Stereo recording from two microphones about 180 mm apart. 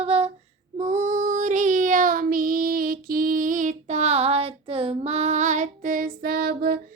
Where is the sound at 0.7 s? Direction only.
40° right (ahead or behind); by 6.8 s 55° right (ahead or behind).